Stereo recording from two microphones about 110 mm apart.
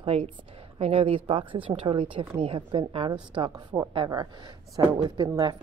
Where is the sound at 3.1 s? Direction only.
45° right (ahead or behind).